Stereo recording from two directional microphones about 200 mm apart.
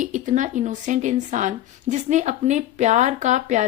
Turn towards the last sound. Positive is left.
turn(degrees=-35)  # may be behind; listen again after turning